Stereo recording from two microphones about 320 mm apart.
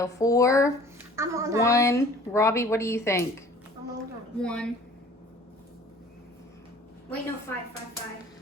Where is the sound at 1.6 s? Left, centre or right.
Centre.